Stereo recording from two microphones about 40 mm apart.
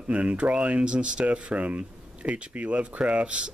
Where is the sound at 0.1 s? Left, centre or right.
Right.